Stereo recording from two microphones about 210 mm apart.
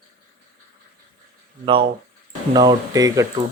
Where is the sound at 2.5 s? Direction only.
20° right (ahead or behind).